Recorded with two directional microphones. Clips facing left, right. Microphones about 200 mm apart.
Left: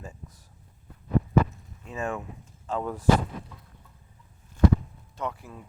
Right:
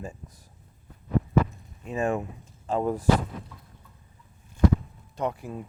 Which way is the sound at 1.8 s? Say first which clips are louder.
Right 5 dB; 15° right (ahead or behind).